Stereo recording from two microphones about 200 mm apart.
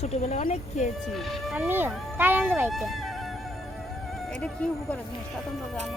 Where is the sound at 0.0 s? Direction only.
35° left (ahead or behind).